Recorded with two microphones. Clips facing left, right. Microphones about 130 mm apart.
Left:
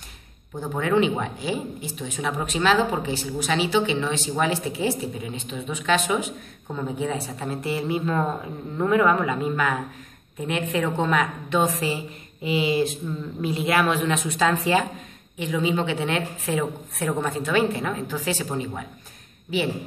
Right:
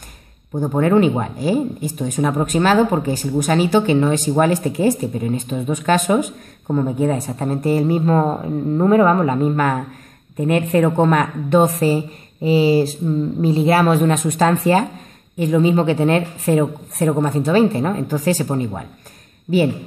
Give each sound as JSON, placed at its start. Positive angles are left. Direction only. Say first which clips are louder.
{"t": 0.6, "sound": "a woman's voice", "louder": "right 7 dB", "side_deg": -45}